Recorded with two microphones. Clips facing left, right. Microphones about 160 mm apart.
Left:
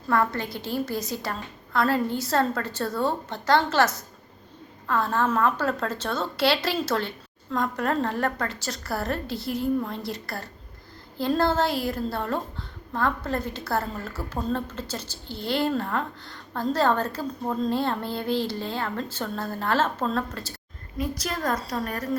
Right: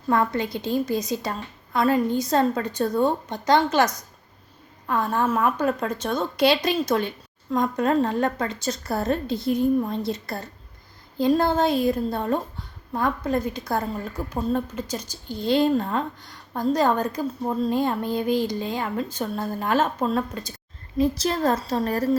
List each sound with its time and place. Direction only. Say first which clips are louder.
0.1 s a woman's voice: right 2 dB; 20° right (ahead or behind)
4.9 s a woman's voice: right 1 dB; 15° right (ahead or behind)
21.0 s a woman's voice: right 7 dB; 25° right (ahead or behind)